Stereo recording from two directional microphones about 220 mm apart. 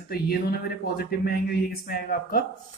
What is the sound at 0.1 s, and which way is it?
Speech, 45° left (ahead or behind).